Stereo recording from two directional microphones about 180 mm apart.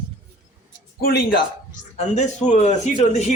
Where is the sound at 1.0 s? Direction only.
60° left (ahead or behind).